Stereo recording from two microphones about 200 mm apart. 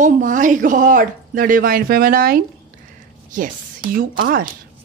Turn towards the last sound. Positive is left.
turn(degrees=-45)  # may be behind; listen again after turning